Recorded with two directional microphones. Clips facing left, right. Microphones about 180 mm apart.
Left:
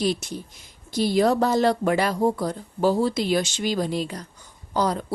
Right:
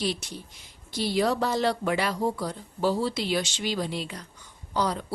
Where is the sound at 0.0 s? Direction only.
45° left (ahead or behind).